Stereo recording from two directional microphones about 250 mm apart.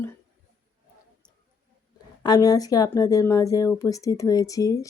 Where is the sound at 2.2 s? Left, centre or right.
Centre.